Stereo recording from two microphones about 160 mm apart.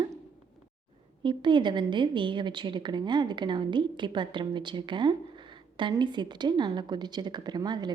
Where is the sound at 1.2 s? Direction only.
30° right (ahead or behind).